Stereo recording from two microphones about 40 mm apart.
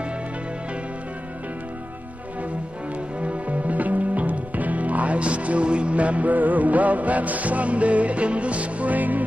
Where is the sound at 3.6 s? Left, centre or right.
Right.